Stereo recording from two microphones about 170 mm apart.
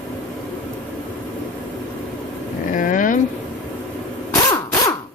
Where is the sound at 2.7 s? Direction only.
50° left (ahead or behind).